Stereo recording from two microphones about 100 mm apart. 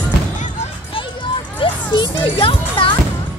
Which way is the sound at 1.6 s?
50° left (ahead or behind).